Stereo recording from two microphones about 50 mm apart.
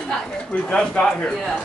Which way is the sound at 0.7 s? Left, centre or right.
Centre.